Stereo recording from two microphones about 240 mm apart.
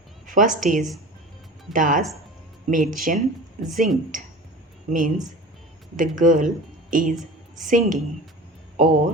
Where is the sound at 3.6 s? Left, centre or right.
Centre.